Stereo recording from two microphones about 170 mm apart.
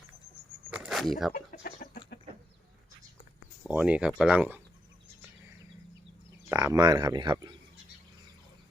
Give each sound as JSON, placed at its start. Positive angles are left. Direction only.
{"t": 0.7, "sound": "a sound", "side_deg": -5}
{"t": 1.3, "sound": "chicken", "side_deg": 50}
{"t": 3.7, "sound": "speech", "side_deg": -5}
{"t": 6.5, "sound": "speech", "side_deg": -20}